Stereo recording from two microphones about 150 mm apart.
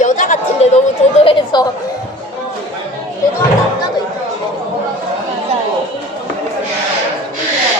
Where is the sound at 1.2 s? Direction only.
30° left (ahead or behind).